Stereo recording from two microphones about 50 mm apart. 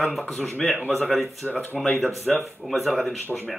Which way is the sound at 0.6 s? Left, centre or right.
Centre.